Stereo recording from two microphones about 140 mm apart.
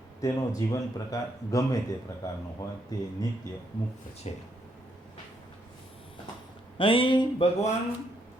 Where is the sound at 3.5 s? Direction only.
25° left (ahead or behind).